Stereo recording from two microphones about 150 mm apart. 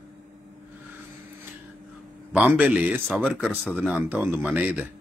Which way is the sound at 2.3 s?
10° right (ahead or behind).